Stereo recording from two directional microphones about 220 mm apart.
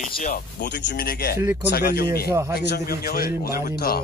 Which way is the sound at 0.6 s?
50° left (ahead or behind).